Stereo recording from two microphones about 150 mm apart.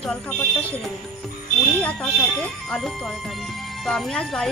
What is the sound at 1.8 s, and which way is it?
Speech, 10° left (ahead or behind).